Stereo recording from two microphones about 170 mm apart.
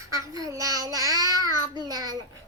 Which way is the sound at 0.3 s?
20° right (ahead or behind).